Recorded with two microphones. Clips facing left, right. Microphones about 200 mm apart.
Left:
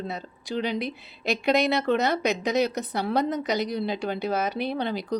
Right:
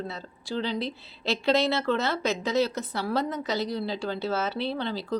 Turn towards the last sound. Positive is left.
turn(degrees=15)  # may be behind; listen again after turning